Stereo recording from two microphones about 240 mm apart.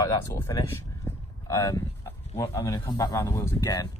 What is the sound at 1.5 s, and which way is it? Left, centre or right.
Speech, centre.